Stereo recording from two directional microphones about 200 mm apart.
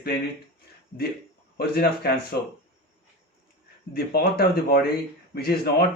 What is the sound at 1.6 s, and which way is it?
Speech, 50° left (ahead or behind).